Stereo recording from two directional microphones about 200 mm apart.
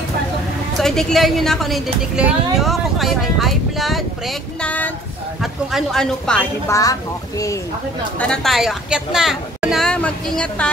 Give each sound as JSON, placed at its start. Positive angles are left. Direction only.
{"t": 0.7, "sound": "a woman's voice", "side_deg": 0}
{"t": 6.7, "sound": "speech", "side_deg": 15}
{"t": 8.2, "sound": "a woman's voice", "side_deg": 5}